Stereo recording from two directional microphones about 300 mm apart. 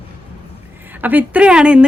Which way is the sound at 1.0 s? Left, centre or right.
Centre.